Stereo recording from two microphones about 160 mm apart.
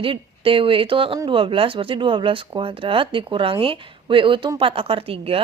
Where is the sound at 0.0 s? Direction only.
35° right (ahead or behind).